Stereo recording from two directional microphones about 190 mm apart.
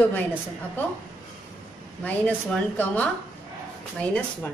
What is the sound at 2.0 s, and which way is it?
A woman's voice, 5° left (ahead or behind).